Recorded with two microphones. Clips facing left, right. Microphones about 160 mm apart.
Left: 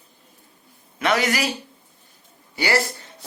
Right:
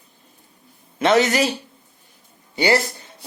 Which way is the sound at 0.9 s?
25° right (ahead or behind).